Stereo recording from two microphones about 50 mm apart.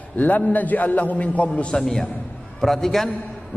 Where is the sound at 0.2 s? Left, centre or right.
Left.